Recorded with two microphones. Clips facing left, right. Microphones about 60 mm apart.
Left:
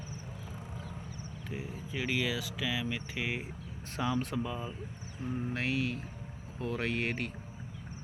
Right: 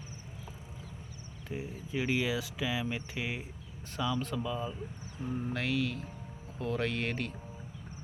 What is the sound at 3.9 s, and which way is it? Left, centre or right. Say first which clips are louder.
Speech: left 1 dB; left.